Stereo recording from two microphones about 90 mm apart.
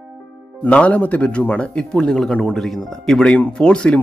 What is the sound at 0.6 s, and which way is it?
Speech, 15° left (ahead or behind).